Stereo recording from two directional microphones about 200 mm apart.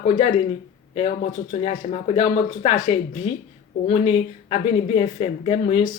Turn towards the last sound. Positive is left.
turn(degrees=30)  # may be behind; listen again after turning